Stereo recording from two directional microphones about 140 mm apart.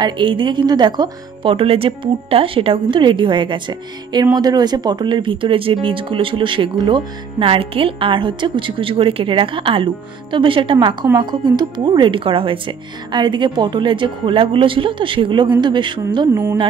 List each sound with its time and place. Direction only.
0.0 s a woman's voice: 35° right (ahead or behind)